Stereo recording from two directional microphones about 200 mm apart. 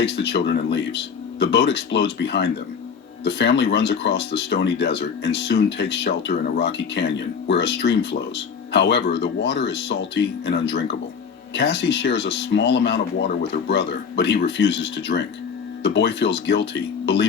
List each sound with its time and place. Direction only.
0.0 s speech: 60° left (ahead or behind)